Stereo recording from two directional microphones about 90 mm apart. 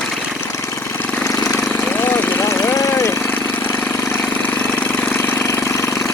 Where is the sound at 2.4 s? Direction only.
35° left (ahead or behind).